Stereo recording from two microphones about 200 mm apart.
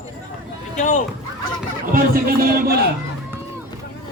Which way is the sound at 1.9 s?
45° right (ahead or behind).